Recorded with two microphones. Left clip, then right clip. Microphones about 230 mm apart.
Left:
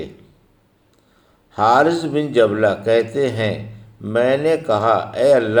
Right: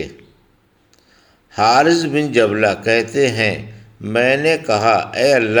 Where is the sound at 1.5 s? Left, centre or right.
Right.